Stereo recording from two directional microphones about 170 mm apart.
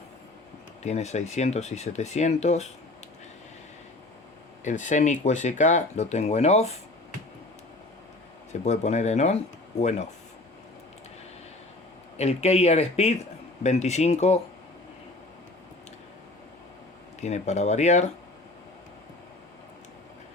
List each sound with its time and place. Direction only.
0.8 s speech: 40° left (ahead or behind)
4.6 s speech: 45° left (ahead or behind)
8.6 s speech: 40° left (ahead or behind)
12.1 s speech: 40° left (ahead or behind)
17.2 s speech: 40° left (ahead or behind)